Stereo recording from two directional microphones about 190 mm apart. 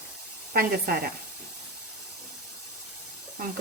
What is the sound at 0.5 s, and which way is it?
Frying, 50° right (ahead or behind).